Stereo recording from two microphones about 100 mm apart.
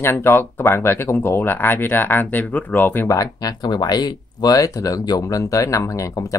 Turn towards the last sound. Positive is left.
turn(degrees=35)  # may be behind; listen again after turning